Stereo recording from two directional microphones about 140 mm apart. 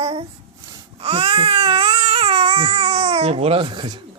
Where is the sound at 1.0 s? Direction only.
40° right (ahead or behind).